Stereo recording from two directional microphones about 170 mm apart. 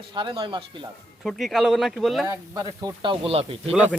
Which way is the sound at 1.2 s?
Centre (ahead or behind).